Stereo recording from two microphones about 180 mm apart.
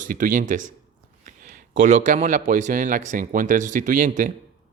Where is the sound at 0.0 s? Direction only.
45° right (ahead or behind).